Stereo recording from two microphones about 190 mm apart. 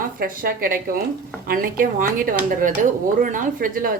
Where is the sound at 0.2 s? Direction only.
50° right (ahead or behind).